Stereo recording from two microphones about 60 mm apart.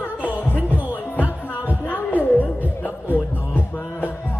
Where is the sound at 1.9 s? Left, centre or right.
Left.